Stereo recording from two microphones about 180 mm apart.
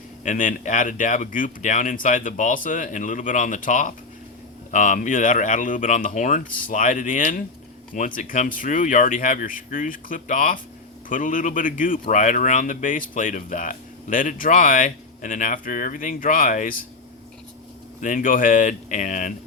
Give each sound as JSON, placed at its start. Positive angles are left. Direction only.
{"t": 0.3, "sound": "speech", "side_deg": 45}
{"t": 18.0, "sound": "speech", "side_deg": 45}